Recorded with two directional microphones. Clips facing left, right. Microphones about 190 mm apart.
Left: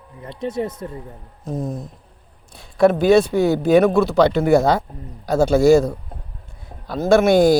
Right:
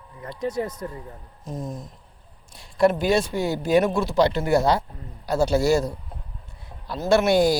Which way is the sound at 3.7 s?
60° left (ahead or behind).